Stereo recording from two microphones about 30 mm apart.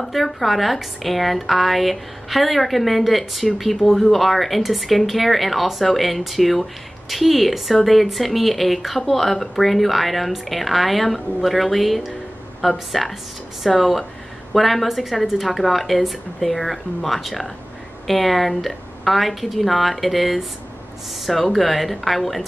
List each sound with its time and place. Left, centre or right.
0.0 s a woman's voice: centre
21.5 s a woman's voice: centre